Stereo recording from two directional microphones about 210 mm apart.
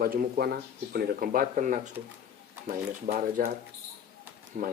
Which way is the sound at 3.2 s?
40° right (ahead or behind).